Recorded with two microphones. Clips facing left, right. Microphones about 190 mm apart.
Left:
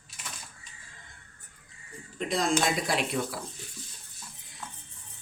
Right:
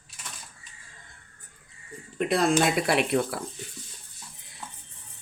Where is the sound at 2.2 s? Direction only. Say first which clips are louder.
Right 5 dB; 60° right (ahead or behind).